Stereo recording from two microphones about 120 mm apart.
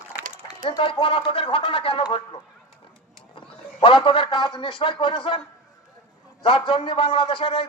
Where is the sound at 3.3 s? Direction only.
45° left (ahead or behind).